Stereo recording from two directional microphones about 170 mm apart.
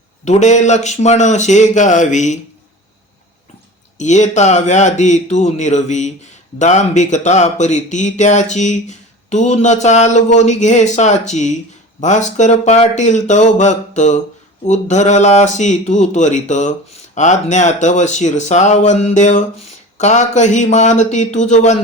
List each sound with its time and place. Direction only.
0.3 s speech: 40° left (ahead or behind)
3.9 s speech: 45° left (ahead or behind)